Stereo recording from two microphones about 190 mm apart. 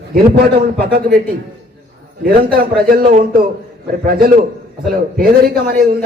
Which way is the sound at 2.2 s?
50° right (ahead or behind).